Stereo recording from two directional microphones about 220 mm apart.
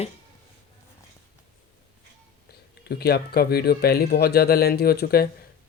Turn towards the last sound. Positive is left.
turn(degrees=45)  # may be behind; listen again after turning